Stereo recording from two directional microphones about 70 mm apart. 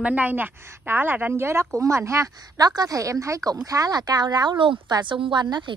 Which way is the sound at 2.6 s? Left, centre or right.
Right.